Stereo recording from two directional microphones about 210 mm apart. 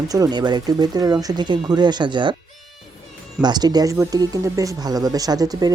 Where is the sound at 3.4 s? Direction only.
20° right (ahead or behind).